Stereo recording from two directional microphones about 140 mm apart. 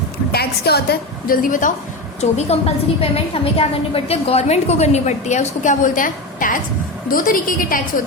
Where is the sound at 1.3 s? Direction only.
75° left (ahead or behind).